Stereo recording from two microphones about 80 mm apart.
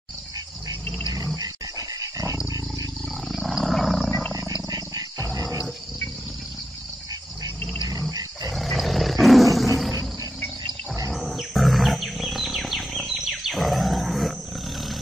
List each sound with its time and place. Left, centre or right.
1.1 s dog: right
3.3 s wild animals: centre
4.6 s wild animals: right
8.5 s roar: centre
11.1 s wild animals: centre